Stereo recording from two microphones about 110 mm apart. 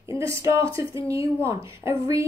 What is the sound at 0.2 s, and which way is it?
A woman's voice, 25° right (ahead or behind).